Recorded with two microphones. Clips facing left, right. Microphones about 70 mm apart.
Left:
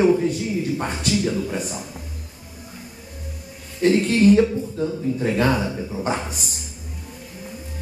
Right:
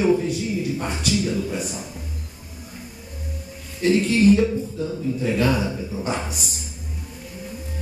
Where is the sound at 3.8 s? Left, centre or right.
Left.